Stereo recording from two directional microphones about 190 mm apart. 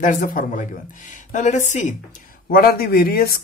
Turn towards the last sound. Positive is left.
turn(degrees=50)  # may be behind; listen again after turning